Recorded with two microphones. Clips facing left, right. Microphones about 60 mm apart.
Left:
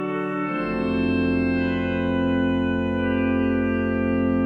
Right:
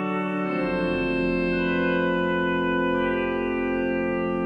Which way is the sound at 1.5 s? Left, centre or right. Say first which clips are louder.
Even; right.